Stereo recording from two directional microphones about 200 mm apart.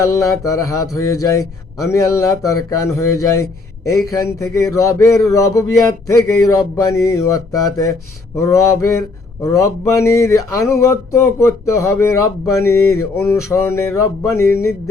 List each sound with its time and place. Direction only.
0.0 s speech: 15° left (ahead or behind)